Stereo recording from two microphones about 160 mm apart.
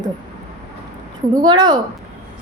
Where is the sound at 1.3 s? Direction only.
25° right (ahead or behind).